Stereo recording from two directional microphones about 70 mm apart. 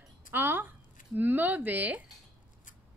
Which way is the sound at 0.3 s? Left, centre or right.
Right.